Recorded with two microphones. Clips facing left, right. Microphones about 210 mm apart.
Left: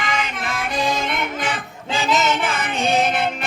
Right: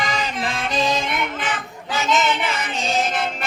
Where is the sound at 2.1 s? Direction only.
45° left (ahead or behind); by 3.2 s 60° left (ahead or behind).